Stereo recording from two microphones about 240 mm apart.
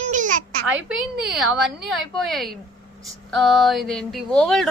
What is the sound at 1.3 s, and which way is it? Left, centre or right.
Speech, centre.